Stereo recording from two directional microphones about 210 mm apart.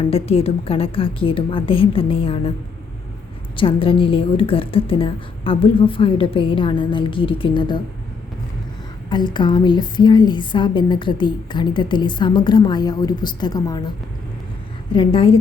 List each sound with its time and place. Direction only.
0.1 s a woman's voice: 30° left (ahead or behind)
3.6 s a woman's voice: 25° left (ahead or behind)
9.0 s a woman's voice: 20° left (ahead or behind)
14.9 s a woman's voice: 25° left (ahead or behind)